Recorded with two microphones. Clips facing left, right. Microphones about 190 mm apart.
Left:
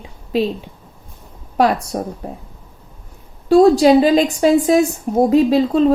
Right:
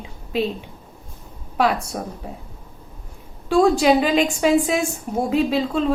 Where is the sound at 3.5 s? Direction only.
35° left (ahead or behind).